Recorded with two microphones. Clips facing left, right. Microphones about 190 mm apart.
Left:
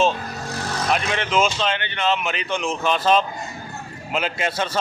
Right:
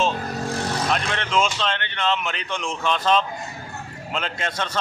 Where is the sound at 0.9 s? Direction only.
5° left (ahead or behind).